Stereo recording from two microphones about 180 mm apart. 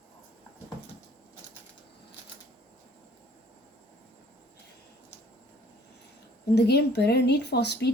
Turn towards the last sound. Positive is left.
turn(degrees=65)  # may be behind; listen again after turning